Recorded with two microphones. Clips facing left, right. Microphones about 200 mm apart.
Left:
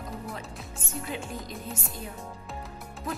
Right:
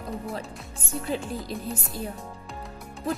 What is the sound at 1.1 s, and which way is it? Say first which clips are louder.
Speech: right 7 dB; 35° right (ahead or behind).